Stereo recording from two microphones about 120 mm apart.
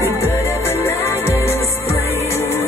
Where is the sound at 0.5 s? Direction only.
20° left (ahead or behind).